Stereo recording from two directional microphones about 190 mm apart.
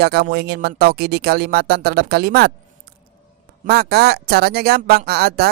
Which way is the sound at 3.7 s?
55° right (ahead or behind).